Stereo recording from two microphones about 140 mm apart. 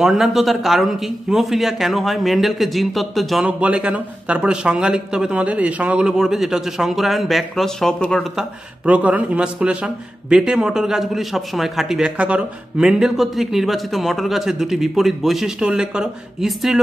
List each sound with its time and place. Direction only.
0.0 s a man's voice: centre (ahead or behind)
8.8 s a man's voice: 10° right (ahead or behind)